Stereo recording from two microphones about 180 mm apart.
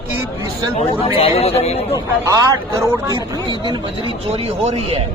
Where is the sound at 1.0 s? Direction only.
35° left (ahead or behind).